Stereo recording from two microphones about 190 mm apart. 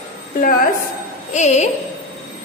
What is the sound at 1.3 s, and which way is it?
Speech, 35° left (ahead or behind).